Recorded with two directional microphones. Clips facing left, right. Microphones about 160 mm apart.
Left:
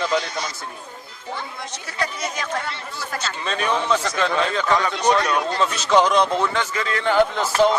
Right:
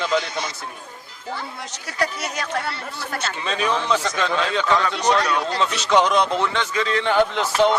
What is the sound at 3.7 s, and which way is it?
Speech, centre (ahead or behind).